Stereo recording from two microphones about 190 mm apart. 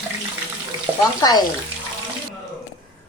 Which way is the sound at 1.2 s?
20° left (ahead or behind).